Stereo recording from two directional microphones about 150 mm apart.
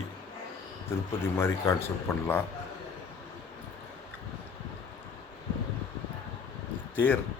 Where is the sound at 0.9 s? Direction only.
15° left (ahead or behind).